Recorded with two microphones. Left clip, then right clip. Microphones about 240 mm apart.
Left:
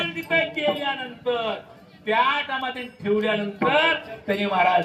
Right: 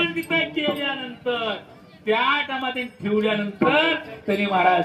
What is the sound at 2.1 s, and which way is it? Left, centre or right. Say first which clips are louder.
Speech: even; left.